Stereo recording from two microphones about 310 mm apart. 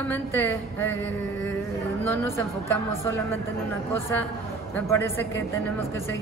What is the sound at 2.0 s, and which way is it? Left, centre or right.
Speech, centre.